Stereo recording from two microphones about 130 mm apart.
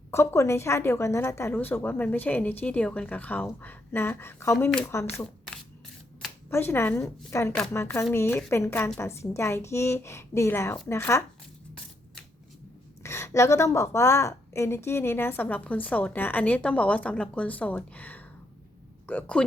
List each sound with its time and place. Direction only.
0.1 s a woman's voice: 20° left (ahead or behind)
6.5 s a woman's voice: 20° left (ahead or behind)
13.0 s a woman's voice: 20° left (ahead or behind)